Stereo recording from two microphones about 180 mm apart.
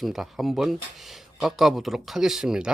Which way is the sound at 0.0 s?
Centre (ahead or behind).